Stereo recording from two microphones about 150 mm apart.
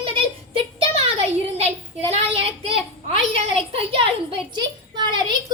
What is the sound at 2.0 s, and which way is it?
A woman's voice, 40° right (ahead or behind).